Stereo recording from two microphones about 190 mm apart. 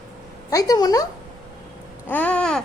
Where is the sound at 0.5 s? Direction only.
20° left (ahead or behind).